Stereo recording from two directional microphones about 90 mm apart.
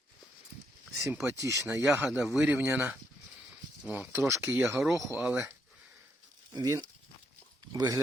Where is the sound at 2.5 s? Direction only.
20° right (ahead or behind).